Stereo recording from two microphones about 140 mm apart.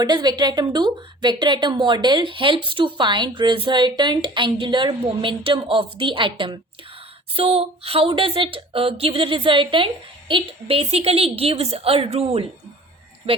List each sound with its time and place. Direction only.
0.0 s a woman's voice: 30° right (ahead or behind)